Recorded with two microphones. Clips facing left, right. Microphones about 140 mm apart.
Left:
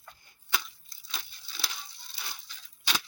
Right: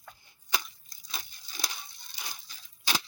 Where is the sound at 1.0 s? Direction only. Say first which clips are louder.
Even; 15° right (ahead or behind).